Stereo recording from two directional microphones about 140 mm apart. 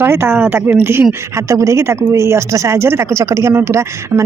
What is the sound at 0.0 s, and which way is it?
A woman's voice, 15° right (ahead or behind).